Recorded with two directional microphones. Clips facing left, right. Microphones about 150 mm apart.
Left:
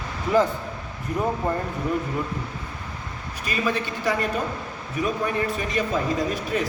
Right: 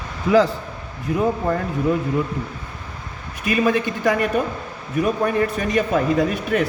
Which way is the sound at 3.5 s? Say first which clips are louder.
Right 7 dB; 50° right (ahead or behind).